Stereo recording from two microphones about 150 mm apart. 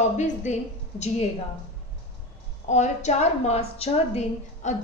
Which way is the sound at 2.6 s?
50° left (ahead or behind).